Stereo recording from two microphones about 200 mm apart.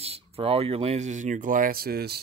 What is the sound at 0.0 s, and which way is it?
Speech, 30° right (ahead or behind).